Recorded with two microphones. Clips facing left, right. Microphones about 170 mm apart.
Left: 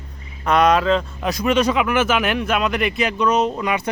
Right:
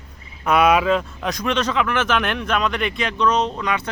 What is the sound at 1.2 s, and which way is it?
Speech, 5° left (ahead or behind).